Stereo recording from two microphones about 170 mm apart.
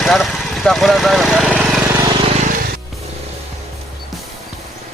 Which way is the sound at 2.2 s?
35° right (ahead or behind).